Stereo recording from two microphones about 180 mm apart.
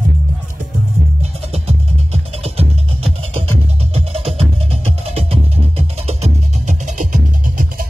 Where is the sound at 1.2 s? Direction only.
35° right (ahead or behind).